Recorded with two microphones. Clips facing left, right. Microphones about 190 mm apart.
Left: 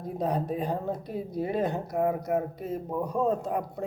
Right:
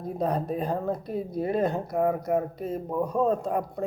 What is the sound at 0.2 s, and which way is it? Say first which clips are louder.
Speech: right 1 dB; 15° left (ahead or behind).